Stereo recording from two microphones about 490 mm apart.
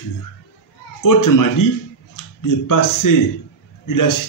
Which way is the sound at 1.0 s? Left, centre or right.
Left.